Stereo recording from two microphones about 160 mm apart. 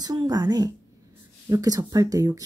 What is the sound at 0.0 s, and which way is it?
A woman's voice, 25° right (ahead or behind).